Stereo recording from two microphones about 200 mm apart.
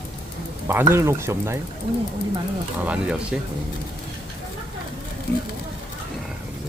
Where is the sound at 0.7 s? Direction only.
10° right (ahead or behind).